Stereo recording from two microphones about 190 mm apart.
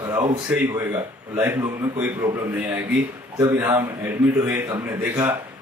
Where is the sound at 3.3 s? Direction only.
15° right (ahead or behind).